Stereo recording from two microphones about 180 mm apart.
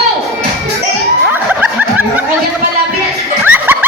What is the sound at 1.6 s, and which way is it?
Snicker, 5° right (ahead or behind).